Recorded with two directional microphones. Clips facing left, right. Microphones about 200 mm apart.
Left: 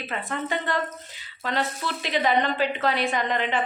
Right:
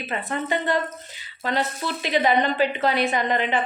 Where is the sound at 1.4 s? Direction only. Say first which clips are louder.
Right 2 dB; 20° right (ahead or behind).